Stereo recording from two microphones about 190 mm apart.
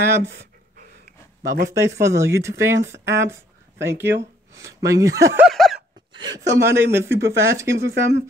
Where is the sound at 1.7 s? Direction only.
15° right (ahead or behind).